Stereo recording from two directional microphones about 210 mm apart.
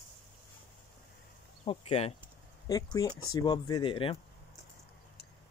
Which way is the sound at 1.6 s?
25° left (ahead or behind).